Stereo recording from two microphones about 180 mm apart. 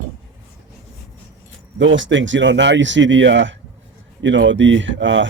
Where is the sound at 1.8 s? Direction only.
90° right.